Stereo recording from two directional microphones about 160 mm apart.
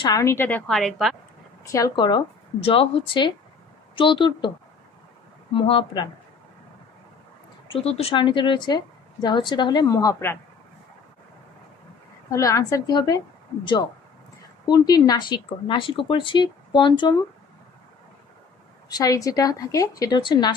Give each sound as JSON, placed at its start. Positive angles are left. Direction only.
{"t": 0.2, "sound": "a woman's voice", "side_deg": 15}
{"t": 1.7, "sound": "a woman's voice", "side_deg": 25}
{"t": 5.5, "sound": "a woman's voice", "side_deg": 30}
{"t": 7.6, "sound": "a woman's voice", "side_deg": 35}
{"t": 12.3, "sound": "a woman's voice", "side_deg": 20}
{"t": 14.7, "sound": "a woman's voice", "side_deg": 25}
{"t": 18.9, "sound": "a woman's voice", "side_deg": 25}